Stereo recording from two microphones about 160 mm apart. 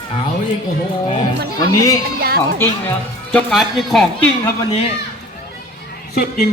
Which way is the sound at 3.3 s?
Centre (ahead or behind).